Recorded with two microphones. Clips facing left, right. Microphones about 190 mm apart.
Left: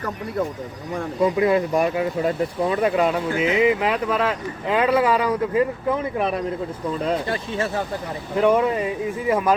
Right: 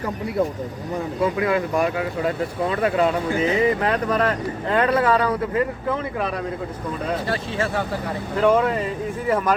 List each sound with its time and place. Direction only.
1.2 s speech: 25° left (ahead or behind)
8.4 s speech: 15° left (ahead or behind)